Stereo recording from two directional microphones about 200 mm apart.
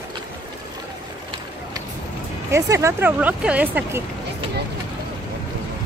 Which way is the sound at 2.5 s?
15° right (ahead or behind).